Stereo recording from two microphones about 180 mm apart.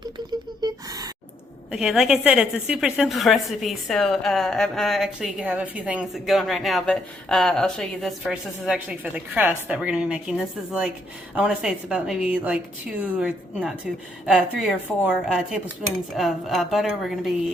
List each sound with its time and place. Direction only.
0.6 s gasp: 20° right (ahead or behind)
1.7 s a woman's voice: 5° right (ahead or behind)